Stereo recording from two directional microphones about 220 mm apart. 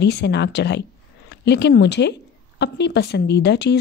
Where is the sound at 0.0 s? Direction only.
50° left (ahead or behind).